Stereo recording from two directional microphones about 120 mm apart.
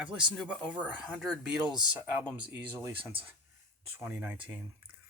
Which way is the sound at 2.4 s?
35° right (ahead or behind).